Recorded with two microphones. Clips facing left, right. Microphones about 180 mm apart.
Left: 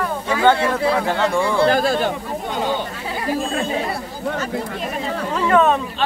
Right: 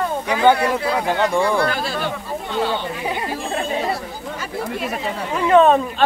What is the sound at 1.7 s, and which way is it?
Speech, 45° left (ahead or behind).